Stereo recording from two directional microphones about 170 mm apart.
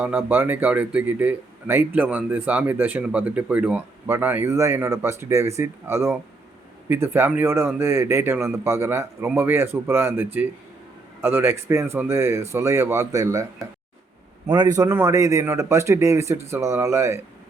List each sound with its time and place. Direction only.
0.0 s speech: 10° right (ahead or behind)
14.5 s speech: 25° right (ahead or behind)